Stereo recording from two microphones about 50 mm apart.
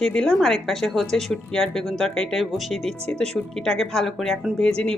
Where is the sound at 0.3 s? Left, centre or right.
Centre.